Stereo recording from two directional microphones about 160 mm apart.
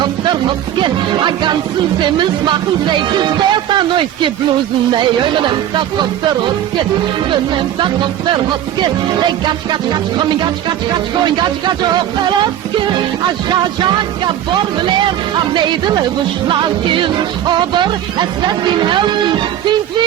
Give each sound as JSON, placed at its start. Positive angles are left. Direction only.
{"t": 0.0, "sound": "music", "side_deg": -30}
{"t": 8.8, "sound": "music", "side_deg": -30}
{"t": 15.5, "sound": "music", "side_deg": -30}